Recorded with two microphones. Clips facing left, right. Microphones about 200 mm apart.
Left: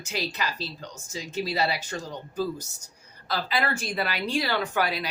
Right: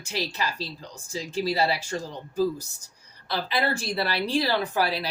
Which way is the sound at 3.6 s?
30° right (ahead or behind).